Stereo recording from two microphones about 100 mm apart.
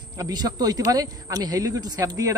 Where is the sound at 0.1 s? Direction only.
40° right (ahead or behind).